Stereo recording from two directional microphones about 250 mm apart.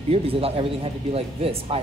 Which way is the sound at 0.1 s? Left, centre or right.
Right.